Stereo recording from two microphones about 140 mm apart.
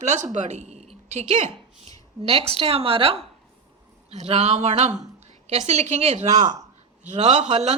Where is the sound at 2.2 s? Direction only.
45° right (ahead or behind).